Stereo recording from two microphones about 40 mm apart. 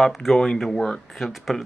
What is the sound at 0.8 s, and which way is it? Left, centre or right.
Speech, centre.